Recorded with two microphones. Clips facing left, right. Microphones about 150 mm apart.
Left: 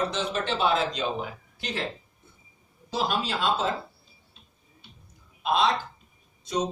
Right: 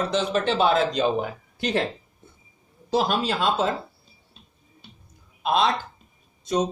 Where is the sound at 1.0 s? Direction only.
55° right (ahead or behind).